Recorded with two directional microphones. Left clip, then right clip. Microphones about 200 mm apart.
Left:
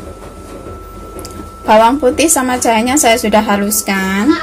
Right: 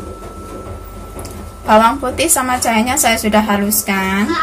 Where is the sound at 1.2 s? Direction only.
35° left (ahead or behind).